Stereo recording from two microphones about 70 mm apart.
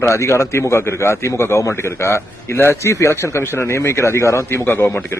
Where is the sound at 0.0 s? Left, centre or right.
Left.